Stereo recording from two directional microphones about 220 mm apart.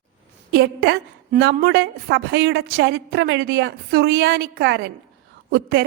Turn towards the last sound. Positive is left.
turn(degrees=-45)  # may be behind; listen again after turning